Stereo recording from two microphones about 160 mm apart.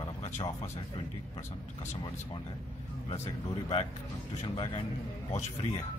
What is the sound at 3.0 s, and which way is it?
Speech, 40° left (ahead or behind).